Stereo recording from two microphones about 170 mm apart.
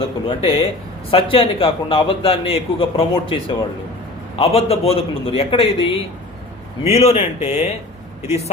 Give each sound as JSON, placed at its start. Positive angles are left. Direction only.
{"t": 0.0, "sound": "a man's voice", "side_deg": 30}
{"t": 7.0, "sound": "a man's voice", "side_deg": 40}